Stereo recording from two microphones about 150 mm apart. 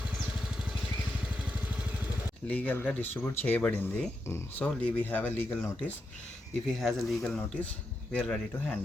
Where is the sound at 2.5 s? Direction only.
10° left (ahead or behind).